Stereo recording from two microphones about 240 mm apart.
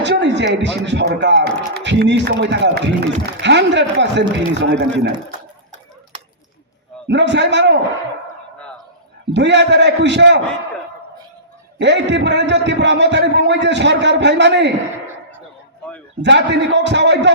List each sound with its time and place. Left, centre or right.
0.0 s speech: right
7.1 s speech: right
9.3 s speech: right
11.8 s speech: right
15.8 s a sound: centre
16.2 s speech: right